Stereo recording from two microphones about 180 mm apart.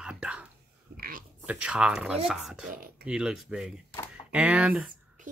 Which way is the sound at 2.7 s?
50° right (ahead or behind).